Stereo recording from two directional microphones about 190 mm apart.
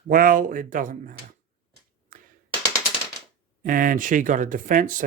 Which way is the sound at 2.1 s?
45° right (ahead or behind).